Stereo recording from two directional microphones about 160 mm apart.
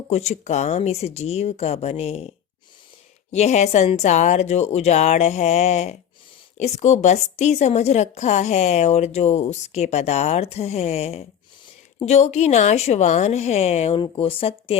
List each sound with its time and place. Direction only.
0.1 s speech: 45° left (ahead or behind)
3.3 s a woman's voice: 45° left (ahead or behind)